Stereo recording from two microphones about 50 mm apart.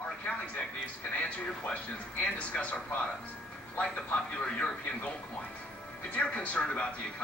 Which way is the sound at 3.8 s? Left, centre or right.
Left.